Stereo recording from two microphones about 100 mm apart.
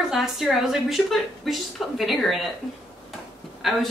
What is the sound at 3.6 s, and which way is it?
Speech, centre (ahead or behind).